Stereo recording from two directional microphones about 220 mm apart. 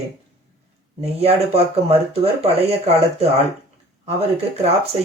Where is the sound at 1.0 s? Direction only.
30° right (ahead or behind).